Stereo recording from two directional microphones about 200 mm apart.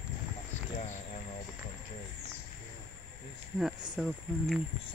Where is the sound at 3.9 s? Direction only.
Centre (ahead or behind).